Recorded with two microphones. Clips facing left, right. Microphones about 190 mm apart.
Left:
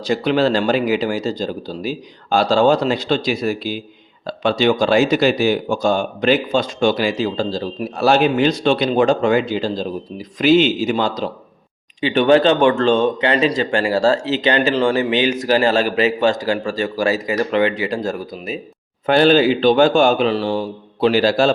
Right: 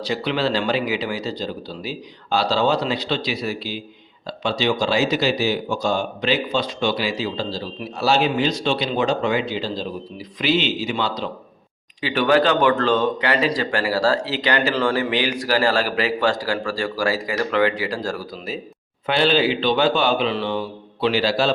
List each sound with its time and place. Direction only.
0.0 s speech: 45° left (ahead or behind)
11.9 s speech: 25° left (ahead or behind)
19.0 s speech: 45° left (ahead or behind)